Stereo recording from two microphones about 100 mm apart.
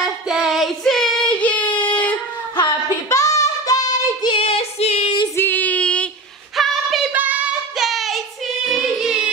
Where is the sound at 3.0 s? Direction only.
30° left (ahead or behind).